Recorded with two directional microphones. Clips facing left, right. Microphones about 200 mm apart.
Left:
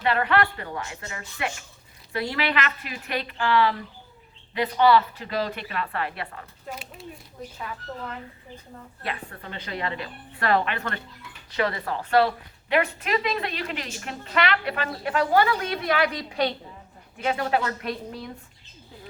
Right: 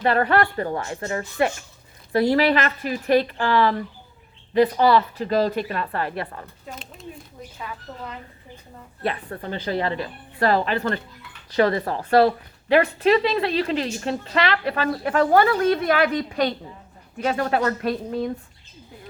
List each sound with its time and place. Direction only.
0.0 s a woman's voice: 40° right (ahead or behind)
9.0 s a woman's voice: 35° right (ahead or behind)